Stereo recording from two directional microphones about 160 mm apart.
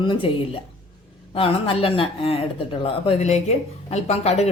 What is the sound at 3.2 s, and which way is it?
A woman's voice, 45° left (ahead or behind).